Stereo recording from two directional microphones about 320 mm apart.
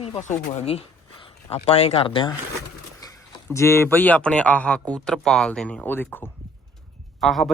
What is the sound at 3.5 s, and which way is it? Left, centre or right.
Speech, centre.